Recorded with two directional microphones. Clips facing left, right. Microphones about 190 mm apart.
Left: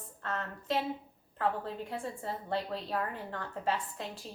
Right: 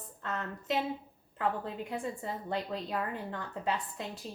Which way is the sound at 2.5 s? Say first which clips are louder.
Left 1 dB; 15° right (ahead or behind).